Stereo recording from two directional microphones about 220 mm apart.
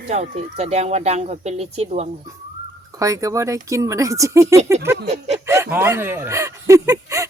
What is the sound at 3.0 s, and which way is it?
Speech, 15° right (ahead or behind).